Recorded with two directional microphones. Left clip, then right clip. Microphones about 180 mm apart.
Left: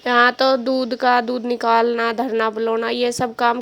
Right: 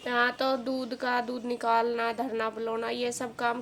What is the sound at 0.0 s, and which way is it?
A woman's voice, 50° left (ahead or behind).